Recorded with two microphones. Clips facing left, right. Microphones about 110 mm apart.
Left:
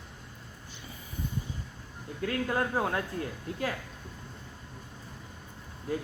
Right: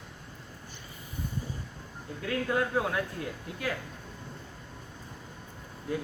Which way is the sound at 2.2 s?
35° left (ahead or behind).